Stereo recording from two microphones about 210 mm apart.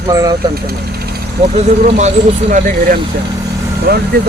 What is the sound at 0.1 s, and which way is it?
Speech, 15° right (ahead or behind).